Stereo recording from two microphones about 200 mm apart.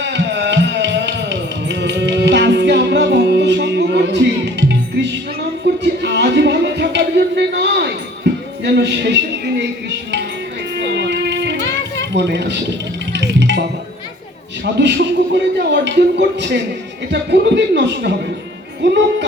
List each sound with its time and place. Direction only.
0.0 s music: 60° right (ahead or behind)
5.8 s music: 60° right (ahead or behind)
12.1 s speech: 60° right (ahead or behind)
13.1 s music: 60° right (ahead or behind)
14.6 s speech: 60° right (ahead or behind)